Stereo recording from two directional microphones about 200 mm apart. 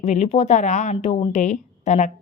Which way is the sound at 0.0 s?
35° left (ahead or behind).